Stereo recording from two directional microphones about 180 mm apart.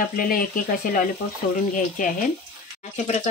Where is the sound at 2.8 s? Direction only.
40° left (ahead or behind).